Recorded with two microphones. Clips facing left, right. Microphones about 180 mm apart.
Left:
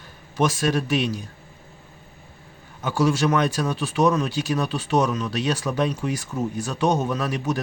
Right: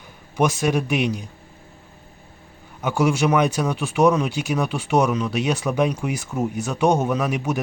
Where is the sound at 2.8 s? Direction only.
15° right (ahead or behind).